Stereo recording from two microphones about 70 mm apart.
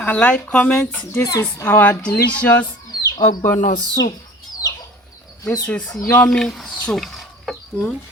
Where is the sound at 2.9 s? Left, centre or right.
Left.